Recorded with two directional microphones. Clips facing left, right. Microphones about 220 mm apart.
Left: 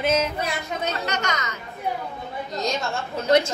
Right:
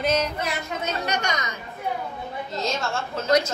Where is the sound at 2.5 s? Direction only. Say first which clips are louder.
Left 1 dB; 15° left (ahead or behind).